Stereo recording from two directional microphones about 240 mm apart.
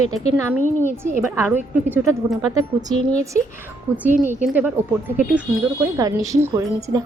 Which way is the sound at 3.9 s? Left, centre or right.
Centre.